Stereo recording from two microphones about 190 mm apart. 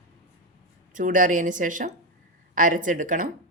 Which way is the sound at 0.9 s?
45° right (ahead or behind).